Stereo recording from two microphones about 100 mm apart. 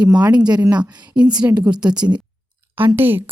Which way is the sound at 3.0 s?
20° right (ahead or behind).